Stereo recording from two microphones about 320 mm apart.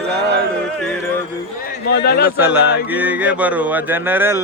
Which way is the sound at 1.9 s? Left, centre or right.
Left.